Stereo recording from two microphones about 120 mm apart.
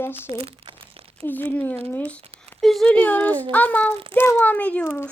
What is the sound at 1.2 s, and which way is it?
A child's voice, 15° left (ahead or behind).